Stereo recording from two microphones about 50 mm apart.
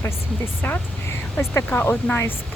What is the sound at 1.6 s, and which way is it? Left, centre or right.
Speech, left.